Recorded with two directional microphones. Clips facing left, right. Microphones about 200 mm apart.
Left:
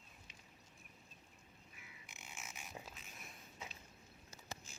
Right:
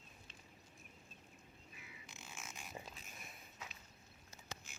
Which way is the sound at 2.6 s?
Centre (ahead or behind).